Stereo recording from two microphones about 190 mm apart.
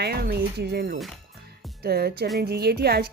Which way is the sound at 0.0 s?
55° right (ahead or behind).